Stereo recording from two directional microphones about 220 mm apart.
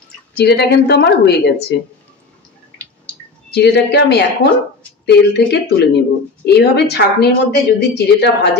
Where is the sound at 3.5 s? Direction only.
50° left (ahead or behind).